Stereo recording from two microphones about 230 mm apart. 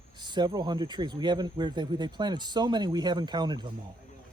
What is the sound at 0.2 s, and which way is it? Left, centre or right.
Speech, centre.